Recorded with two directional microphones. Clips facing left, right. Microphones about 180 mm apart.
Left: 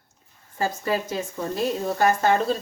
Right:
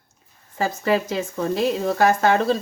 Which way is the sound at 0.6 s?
80° right.